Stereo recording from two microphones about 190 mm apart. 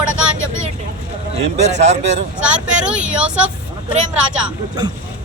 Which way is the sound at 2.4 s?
5° right (ahead or behind).